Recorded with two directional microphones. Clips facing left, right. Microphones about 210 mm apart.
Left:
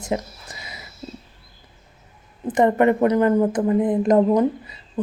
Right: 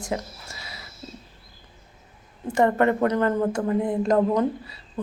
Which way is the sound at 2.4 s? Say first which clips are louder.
Left 3 dB; 20° left (ahead or behind).